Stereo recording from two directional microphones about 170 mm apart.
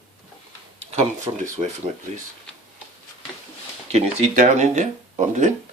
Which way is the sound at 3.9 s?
40° right (ahead or behind).